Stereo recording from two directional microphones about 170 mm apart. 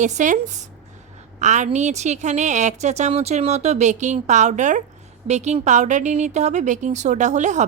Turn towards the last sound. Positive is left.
turn(degrees=-45)  # may be behind; listen again after turning